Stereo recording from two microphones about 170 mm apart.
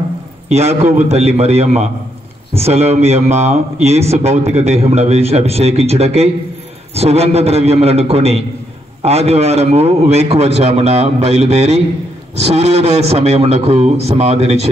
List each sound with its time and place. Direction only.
0.5 s speech: 40° right (ahead or behind)